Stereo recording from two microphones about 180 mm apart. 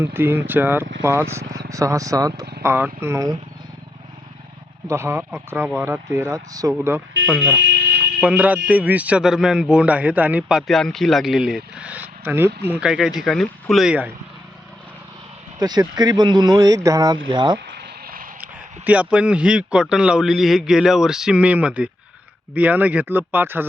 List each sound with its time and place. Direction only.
0.0 s speech: 10° right (ahead or behind)
4.9 s speech: 15° right (ahead or behind)
7.3 s a man's voice: 5° left (ahead or behind)
7.7 s fire alarm: 70° right (ahead or behind)
8.2 s a man's voice: 5° right (ahead or behind)
15.5 s speech: 20° right (ahead or behind)
17.7 s a sound: 60° right (ahead or behind)
18.9 s a man's voice: 5° right (ahead or behind)